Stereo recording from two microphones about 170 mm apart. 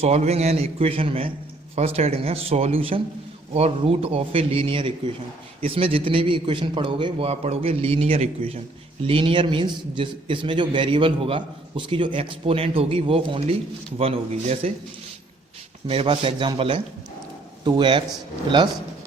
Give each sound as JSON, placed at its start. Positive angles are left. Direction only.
{"t": 0.0, "sound": "a man's voice", "side_deg": -40}
{"t": 15.9, "sound": "a man's voice", "side_deg": -35}